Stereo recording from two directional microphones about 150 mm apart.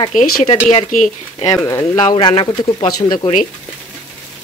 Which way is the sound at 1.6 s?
20° left (ahead or behind).